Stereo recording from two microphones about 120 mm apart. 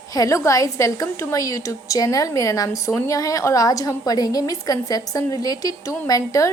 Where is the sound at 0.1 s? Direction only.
30° left (ahead or behind).